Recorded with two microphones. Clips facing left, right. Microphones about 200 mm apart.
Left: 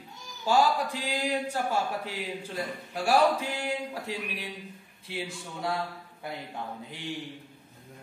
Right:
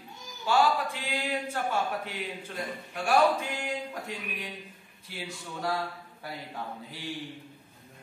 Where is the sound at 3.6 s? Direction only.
30° left (ahead or behind).